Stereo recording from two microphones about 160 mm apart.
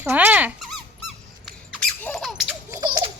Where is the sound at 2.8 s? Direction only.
30° right (ahead or behind).